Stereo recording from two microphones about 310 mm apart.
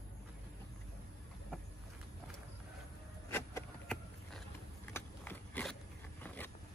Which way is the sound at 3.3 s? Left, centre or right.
Centre.